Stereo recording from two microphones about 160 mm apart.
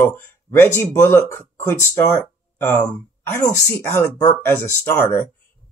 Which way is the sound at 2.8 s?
25° left (ahead or behind).